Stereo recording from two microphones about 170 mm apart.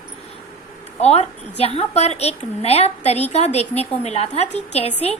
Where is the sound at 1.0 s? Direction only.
40° left (ahead or behind).